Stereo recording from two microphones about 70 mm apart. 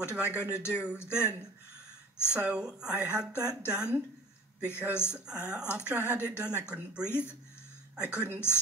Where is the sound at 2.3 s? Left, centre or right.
Centre.